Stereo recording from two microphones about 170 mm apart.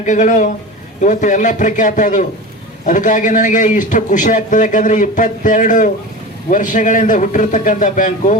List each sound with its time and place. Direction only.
0.0 s a man's voice: 50° left (ahead or behind)